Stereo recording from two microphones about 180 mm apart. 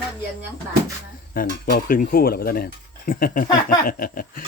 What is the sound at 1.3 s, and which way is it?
Speech, 50° left (ahead or behind).